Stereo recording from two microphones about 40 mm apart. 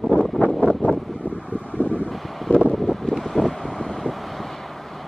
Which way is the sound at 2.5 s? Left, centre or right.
Left.